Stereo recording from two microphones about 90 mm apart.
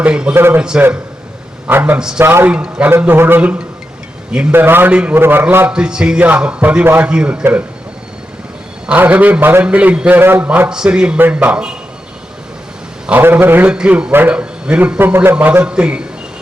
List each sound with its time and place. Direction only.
0.0 s a man's voice: 10° right (ahead or behind)
0.3 s a man's voice: 25° right (ahead or behind)
1.6 s a man's voice: 20° right (ahead or behind)
2.0 s a man's voice: 10° right (ahead or behind)
2.2 s a man's voice: 25° right (ahead or behind)
2.5 s a man's voice: 15° right (ahead or behind)
5.7 s a man's voice: 10° right (ahead or behind)
8.9 s a man's voice: 15° right (ahead or behind)
10.2 s a man's voice: 25° right (ahead or behind)
10.7 s a man's voice: 10° right (ahead or behind)
13.1 s a man's voice: 20° right (ahead or behind)